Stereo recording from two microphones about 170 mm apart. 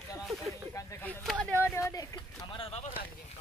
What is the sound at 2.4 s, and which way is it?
Speech, 30° left (ahead or behind).